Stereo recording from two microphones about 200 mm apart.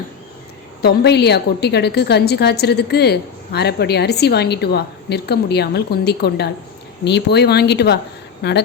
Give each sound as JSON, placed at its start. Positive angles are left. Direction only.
{"t": 0.8, "sound": "a woman's voice", "side_deg": 55}